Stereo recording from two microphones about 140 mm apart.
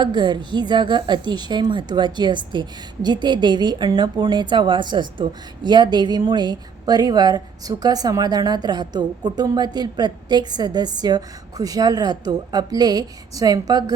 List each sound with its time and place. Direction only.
0.0 s a woman's voice: 30° right (ahead or behind)